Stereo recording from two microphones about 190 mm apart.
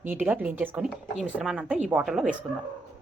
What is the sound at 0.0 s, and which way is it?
Speech, 10° right (ahead or behind).